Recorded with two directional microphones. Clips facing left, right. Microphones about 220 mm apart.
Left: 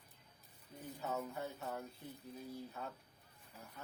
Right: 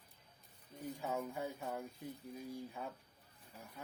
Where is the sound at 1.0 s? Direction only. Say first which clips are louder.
Right 1 dB; 15° right (ahead or behind).